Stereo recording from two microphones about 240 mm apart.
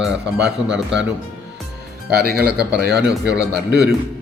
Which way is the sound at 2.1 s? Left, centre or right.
Right.